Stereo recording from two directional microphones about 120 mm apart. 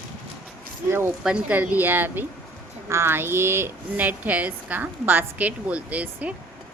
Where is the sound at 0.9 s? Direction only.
20° right (ahead or behind).